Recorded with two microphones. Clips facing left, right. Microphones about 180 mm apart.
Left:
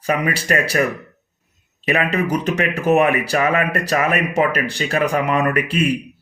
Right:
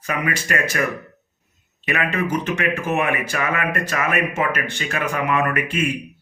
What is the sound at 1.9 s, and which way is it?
Speech, 35° left (ahead or behind).